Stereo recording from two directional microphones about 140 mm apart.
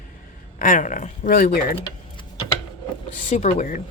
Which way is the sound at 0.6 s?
65° left (ahead or behind).